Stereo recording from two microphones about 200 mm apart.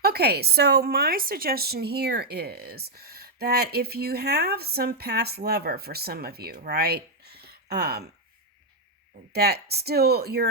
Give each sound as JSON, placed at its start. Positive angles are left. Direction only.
{"t": 0.0, "sound": "a woman's voice", "side_deg": -50}
{"t": 9.3, "sound": "a woman's voice", "side_deg": -50}